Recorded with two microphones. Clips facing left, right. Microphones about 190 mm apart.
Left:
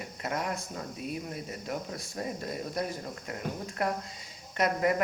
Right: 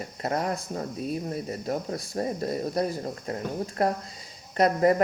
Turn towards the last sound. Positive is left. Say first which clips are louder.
# right 6 dB
turn(degrees=-35)  # may be behind; listen again after turning